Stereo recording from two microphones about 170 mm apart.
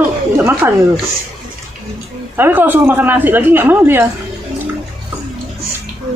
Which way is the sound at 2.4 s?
10° right (ahead or behind).